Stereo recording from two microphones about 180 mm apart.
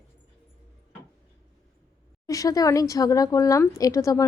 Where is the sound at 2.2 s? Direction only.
20° left (ahead or behind).